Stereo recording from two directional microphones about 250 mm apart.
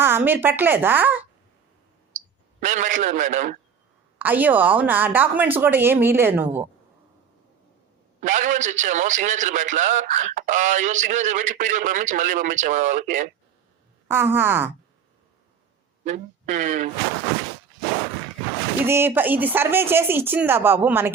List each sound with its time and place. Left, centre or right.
0.0 s a woman's voice: centre
2.6 s a man's voice: right
4.2 s a woman's voice: centre
8.2 s a man's voice: right
14.1 s a woman's voice: centre
16.0 s a man's voice: right
18.9 s a woman's voice: centre